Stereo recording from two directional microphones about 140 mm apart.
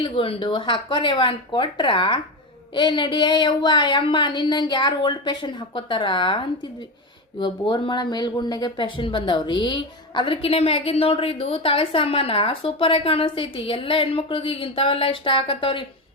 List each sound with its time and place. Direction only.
0.0 s speech: 40° left (ahead or behind)